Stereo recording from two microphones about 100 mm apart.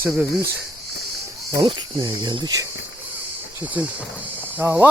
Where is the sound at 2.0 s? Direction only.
45° right (ahead or behind).